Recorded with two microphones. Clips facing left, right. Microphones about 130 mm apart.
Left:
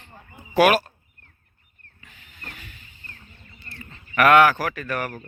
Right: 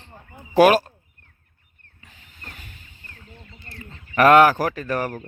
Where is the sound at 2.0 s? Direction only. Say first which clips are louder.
Even; 35° right (ahead or behind).